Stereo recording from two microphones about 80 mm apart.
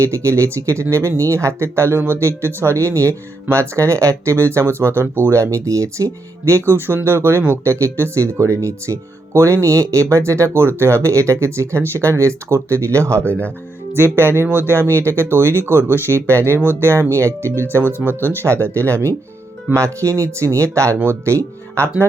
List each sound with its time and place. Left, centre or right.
0.0 s speech: right